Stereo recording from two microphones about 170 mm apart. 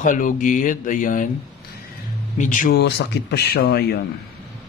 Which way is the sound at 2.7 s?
80° left.